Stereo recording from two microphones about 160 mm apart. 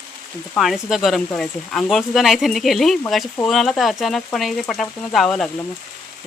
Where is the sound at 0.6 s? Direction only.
Centre (ahead or behind).